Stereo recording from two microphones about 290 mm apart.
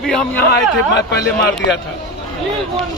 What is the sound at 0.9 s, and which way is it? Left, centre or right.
Speech, left.